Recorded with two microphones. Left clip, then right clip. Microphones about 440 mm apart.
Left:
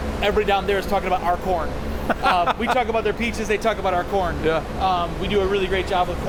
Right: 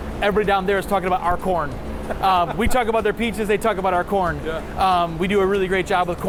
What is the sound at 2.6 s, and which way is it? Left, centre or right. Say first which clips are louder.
Speech: right 1 dB; right.